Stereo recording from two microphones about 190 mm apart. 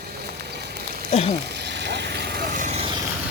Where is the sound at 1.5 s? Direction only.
65° right (ahead or behind); by 2.8 s 40° right (ahead or behind).